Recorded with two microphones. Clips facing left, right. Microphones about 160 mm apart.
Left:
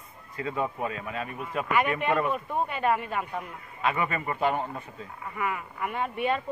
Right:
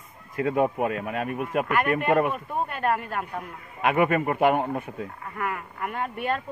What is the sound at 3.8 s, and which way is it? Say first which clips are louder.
A man's voice: right 7 dB; 60° right (ahead or behind).